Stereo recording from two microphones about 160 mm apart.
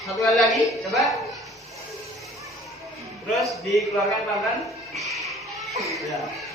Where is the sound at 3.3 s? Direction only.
Centre (ahead or behind).